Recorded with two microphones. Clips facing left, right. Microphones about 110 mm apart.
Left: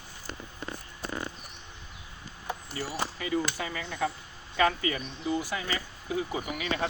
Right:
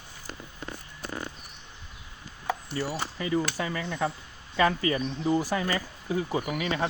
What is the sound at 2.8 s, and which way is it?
Speech, 35° right (ahead or behind).